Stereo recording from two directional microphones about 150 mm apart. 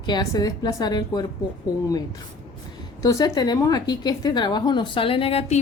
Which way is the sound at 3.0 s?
25° left (ahead or behind).